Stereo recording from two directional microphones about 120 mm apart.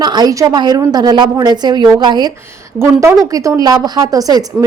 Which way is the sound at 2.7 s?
25° right (ahead or behind).